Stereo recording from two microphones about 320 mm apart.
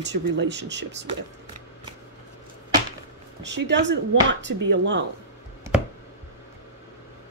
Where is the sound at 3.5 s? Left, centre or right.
Right.